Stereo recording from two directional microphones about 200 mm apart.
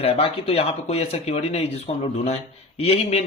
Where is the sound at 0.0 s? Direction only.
30° left (ahead or behind).